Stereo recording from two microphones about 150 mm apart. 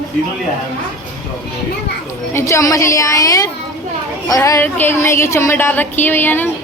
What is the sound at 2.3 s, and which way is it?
A woman's voice, 20° left (ahead or behind).